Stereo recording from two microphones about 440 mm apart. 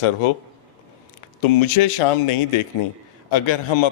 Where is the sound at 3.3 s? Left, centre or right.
Left.